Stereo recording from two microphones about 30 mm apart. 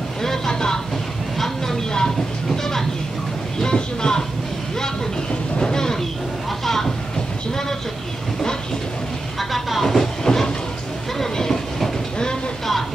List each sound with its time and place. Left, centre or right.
0.5 s a sound: left
1.9 s train: centre
3.6 s speech: left
5.6 s train: left
6.6 s a sound: centre
9.4 s vehicle: centre
10.2 s train: centre